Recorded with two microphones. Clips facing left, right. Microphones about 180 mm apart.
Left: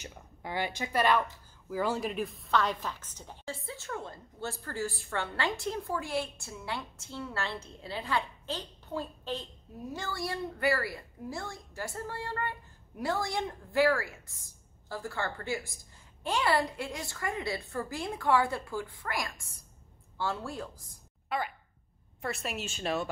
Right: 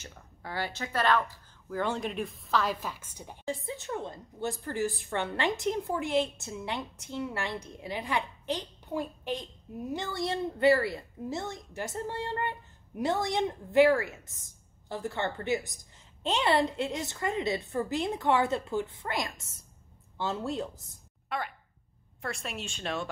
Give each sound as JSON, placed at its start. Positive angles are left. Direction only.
{"t": 0.0, "sound": "a woman's voice", "side_deg": 15}
{"t": 21.3, "sound": "speech", "side_deg": 0}